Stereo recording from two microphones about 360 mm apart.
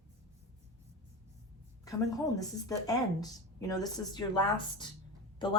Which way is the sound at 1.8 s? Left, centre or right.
Centre.